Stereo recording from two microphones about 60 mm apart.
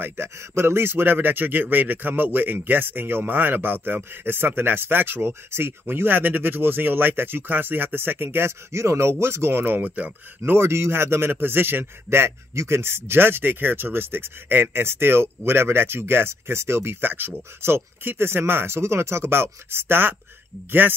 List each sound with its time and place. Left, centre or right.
0.0 s speech: right
10.4 s speech: right